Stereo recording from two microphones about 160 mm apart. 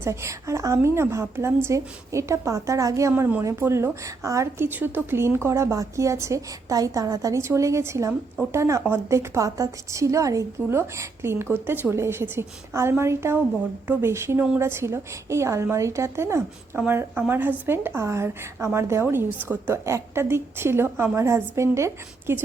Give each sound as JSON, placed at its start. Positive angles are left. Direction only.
{"t": 0.0, "sound": "a woman's voice", "side_deg": -15}